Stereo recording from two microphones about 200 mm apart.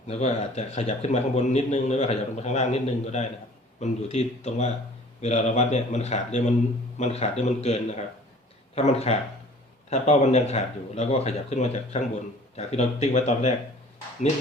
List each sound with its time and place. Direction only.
0.1 s a man's voice: 35° left (ahead or behind)